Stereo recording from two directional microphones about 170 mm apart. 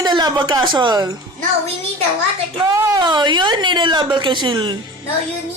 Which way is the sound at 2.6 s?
20° right (ahead or behind).